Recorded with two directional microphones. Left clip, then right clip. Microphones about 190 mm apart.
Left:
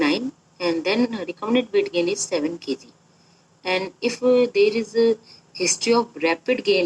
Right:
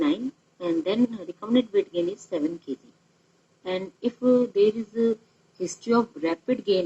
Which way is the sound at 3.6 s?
20° left (ahead or behind).